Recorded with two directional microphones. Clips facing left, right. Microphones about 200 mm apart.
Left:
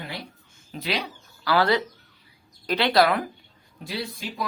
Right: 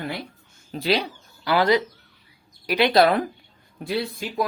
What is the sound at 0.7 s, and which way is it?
Speech, 30° right (ahead or behind).